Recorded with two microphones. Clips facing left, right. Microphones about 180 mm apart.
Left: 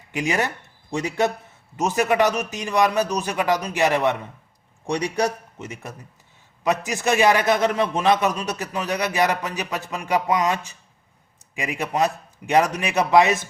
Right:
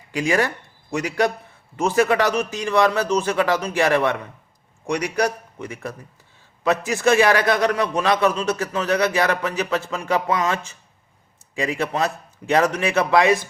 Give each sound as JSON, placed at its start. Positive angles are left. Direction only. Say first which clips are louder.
{"t": 0.1, "sound": "a man's voice", "louder": "right 3 dB", "side_deg": 20}
{"t": 4.9, "sound": "a man's voice", "louder": "right 1 dB", "side_deg": 30}